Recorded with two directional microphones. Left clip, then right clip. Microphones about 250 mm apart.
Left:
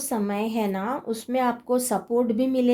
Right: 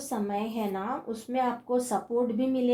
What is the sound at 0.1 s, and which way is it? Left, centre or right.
A woman's voice, left.